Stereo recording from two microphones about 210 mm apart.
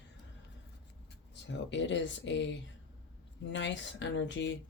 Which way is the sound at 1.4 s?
60° left (ahead or behind).